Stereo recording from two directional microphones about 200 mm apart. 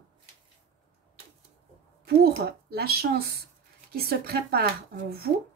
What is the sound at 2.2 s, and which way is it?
A woman's voice, 50° right (ahead or behind).